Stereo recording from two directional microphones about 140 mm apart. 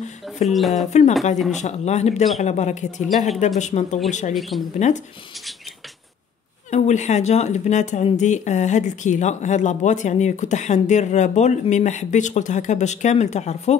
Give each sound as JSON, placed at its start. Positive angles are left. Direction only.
{"t": 0.5, "sound": "speech", "side_deg": 0}
{"t": 0.8, "sound": "speech", "side_deg": 55}
{"t": 4.3, "sound": "speech", "side_deg": 0}
{"t": 4.7, "sound": "speech", "side_deg": 55}
{"t": 6.7, "sound": "speech", "side_deg": 55}